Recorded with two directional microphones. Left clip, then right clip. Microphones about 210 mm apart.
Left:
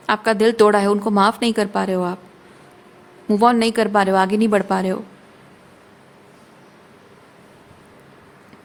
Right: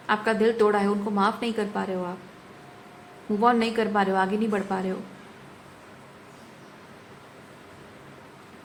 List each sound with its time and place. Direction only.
0.1 s a woman's voice: 60° left (ahead or behind)
3.4 s a woman's voice: 60° left (ahead or behind)